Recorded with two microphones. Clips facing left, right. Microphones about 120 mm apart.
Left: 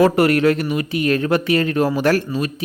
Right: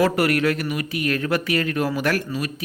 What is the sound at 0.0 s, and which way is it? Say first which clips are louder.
Speech: left 5 dB; 25° left (ahead or behind).